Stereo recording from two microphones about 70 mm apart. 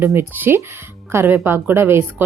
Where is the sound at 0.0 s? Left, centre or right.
Right.